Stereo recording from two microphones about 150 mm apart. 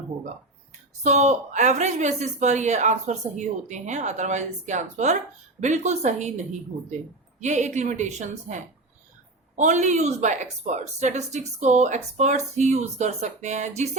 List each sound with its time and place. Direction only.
1.0 s a woman's voice: 50° right (ahead or behind)
9.6 s a woman's voice: 55° right (ahead or behind)